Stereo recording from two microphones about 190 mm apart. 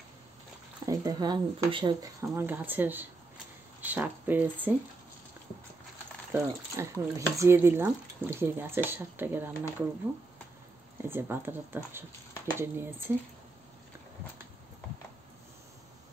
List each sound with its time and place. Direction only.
0.8 s speech: 20° right (ahead or behind)
6.3 s speech: 15° right (ahead or behind)
11.0 s speech: 10° right (ahead or behind)